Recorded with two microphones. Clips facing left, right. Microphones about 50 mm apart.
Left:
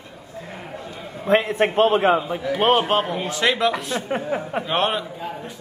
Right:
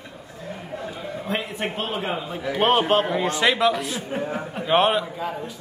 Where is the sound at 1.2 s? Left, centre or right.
Left.